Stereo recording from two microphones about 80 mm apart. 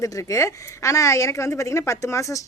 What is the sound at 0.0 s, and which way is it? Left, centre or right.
A woman's voice, left.